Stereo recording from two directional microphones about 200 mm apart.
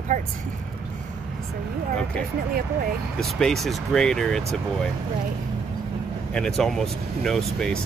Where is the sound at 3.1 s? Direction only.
Centre (ahead or behind).